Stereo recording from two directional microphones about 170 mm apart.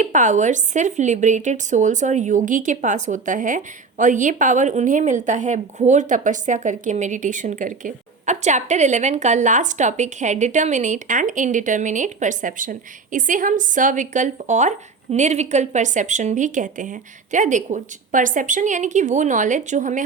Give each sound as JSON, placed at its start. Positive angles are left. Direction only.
{"t": 0.0, "sound": "a woman's voice", "side_deg": -45}